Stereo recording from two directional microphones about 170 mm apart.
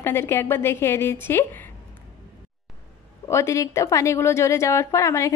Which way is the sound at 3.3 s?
15° left (ahead or behind).